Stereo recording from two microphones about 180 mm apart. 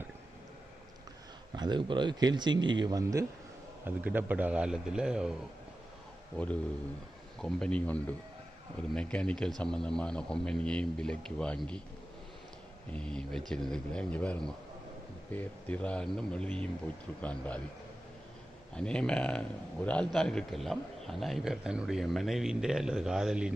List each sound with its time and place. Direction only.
1.5 s a man's voice: 25° right (ahead or behind); by 5.3 s 5° right (ahead or behind)
6.3 s a man's voice: 5° left (ahead or behind)
12.9 s a man's voice: 5° left (ahead or behind)
18.7 s a man's voice: 5° left (ahead or behind)